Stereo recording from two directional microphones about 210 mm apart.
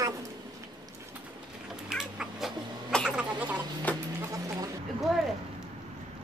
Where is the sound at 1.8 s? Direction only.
Centre (ahead or behind).